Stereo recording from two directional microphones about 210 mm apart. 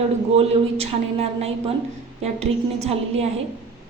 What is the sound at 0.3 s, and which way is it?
A woman's voice, 30° right (ahead or behind).